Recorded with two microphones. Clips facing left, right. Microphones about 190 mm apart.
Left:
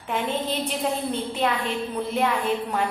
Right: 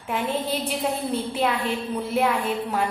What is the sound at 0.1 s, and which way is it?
A woman's voice, 5° right (ahead or behind).